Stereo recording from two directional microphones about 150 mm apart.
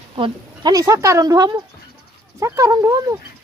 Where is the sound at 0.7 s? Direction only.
20° right (ahead or behind).